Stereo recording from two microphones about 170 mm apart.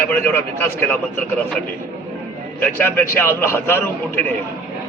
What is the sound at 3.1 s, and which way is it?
A man's voice, 15° left (ahead or behind).